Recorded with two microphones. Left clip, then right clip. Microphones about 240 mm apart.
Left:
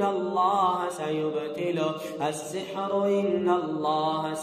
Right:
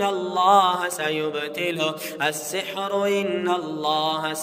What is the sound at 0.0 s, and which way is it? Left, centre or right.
Mantra, right.